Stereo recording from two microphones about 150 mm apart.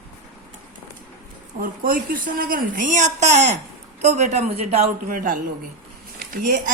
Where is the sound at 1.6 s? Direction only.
70° right (ahead or behind); by 4.8 s 45° right (ahead or behind).